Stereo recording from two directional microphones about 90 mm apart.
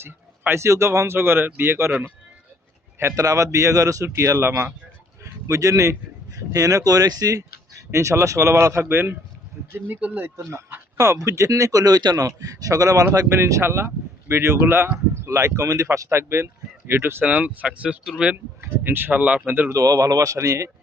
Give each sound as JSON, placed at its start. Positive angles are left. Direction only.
{"t": 0.0, "sound": "speech", "side_deg": -30}
{"t": 3.0, "sound": "speech", "side_deg": -30}
{"t": 7.9, "sound": "speech", "side_deg": -30}
{"t": 13.2, "sound": "speech", "side_deg": -30}
{"t": 19.7, "sound": "speech", "side_deg": -40}